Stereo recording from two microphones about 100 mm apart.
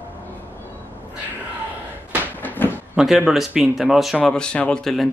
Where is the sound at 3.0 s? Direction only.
5° right (ahead or behind).